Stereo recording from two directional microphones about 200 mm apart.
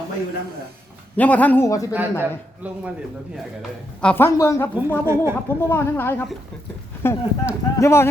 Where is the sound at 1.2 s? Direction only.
10° left (ahead or behind).